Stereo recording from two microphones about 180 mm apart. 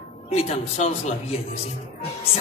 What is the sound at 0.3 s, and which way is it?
Speech, 35° left (ahead or behind).